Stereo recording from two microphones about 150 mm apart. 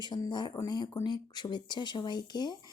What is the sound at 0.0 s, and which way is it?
Speech, 30° left (ahead or behind).